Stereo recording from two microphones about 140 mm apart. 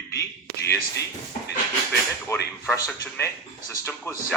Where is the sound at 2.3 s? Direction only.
15° left (ahead or behind).